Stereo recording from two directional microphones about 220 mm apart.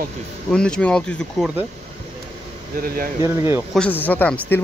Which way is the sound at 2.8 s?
40° right (ahead or behind).